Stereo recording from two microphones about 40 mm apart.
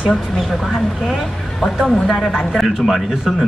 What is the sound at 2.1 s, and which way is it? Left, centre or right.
A man's voice, centre.